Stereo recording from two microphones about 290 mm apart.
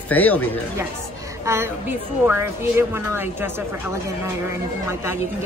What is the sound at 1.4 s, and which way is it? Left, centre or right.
A woman's voice, centre.